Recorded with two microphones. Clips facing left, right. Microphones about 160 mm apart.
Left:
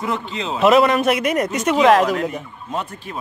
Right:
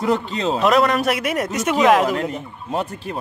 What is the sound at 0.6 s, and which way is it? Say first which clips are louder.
Speech: left 4 dB; centre (ahead or behind).